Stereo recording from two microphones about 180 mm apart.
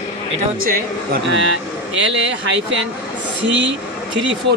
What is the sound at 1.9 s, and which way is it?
Speech, 90° right.